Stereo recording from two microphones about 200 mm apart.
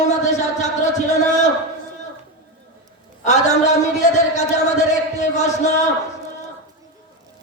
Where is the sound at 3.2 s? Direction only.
35° left (ahead or behind).